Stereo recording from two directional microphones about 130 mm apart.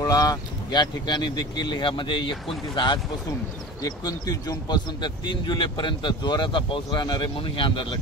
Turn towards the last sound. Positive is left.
turn(degrees=40)  # may be behind; listen again after turning